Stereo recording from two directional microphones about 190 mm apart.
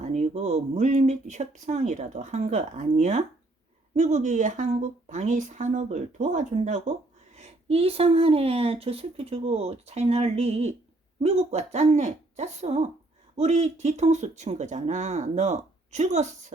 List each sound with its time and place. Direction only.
0.0 s a woman's voice: 35° right (ahead or behind)